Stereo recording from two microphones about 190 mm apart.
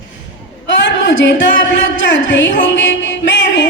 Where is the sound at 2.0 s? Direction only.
75° left (ahead or behind).